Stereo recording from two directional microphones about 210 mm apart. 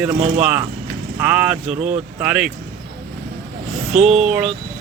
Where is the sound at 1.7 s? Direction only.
35° right (ahead or behind).